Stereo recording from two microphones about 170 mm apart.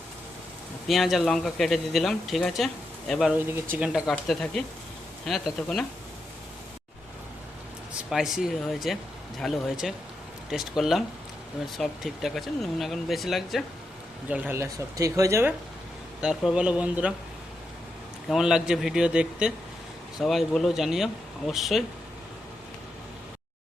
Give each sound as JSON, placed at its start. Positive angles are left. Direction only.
{"t": 0.9, "sound": "speech", "side_deg": 0}
{"t": 8.1, "sound": "speech", "side_deg": 0}
{"t": 16.2, "sound": "speech", "side_deg": 0}
{"t": 18.3, "sound": "speech", "side_deg": -5}